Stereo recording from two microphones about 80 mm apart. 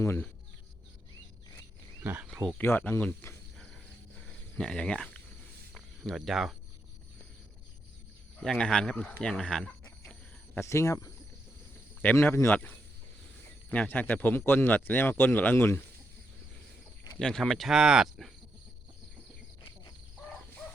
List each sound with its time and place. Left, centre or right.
2.3 s speech: centre
2.6 s speech: left
4.5 s speech: centre
8.4 s speech: centre
10.5 s speech: left
12.1 s speech: left
13.7 s speech: left
17.2 s speech: centre